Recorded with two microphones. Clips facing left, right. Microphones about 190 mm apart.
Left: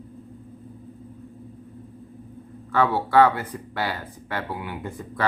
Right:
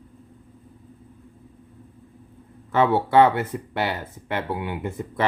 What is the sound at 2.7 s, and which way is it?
Speech, 20° right (ahead or behind).